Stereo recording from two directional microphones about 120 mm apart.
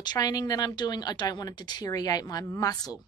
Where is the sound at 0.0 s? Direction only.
35° left (ahead or behind).